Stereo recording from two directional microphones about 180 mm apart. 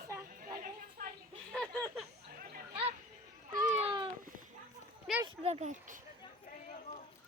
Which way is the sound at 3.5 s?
45° right (ahead or behind).